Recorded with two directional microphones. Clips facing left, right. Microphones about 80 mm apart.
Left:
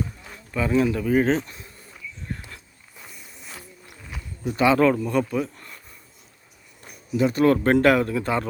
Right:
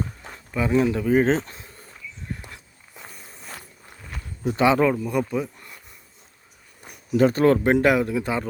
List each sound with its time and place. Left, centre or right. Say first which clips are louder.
0.5 s speech: right 1 dB; centre
2.5 s a sound: even; right
3.1 s walk: right 1 dB; right
4.4 s speech: even; right; by 5.2 s centre
5.3 s a sound: left 1 dB; centre
7.1 s speech: right 3 dB; right
7.6 s speech: left 1 dB; centre